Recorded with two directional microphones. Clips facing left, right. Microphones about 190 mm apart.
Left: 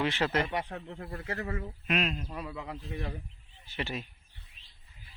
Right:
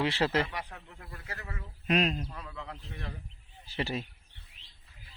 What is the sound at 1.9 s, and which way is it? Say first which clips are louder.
Speech: right 3 dB; 40° right (ahead or behind).